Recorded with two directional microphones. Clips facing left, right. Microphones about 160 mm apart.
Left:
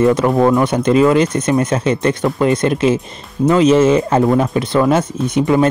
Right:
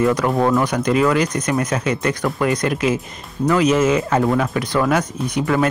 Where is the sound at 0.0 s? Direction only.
25° left (ahead or behind).